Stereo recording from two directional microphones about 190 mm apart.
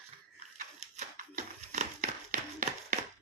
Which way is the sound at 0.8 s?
45° right (ahead or behind).